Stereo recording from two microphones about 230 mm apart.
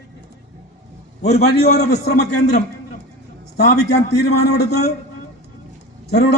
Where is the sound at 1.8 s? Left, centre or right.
Left.